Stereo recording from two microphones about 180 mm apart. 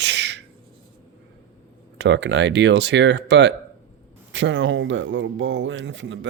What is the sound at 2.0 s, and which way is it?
Speech, 85° right.